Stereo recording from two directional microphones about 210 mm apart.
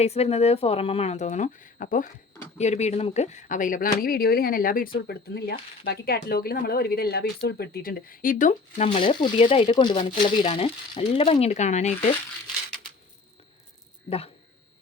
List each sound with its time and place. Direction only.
0.0 s speech: 30° left (ahead or behind)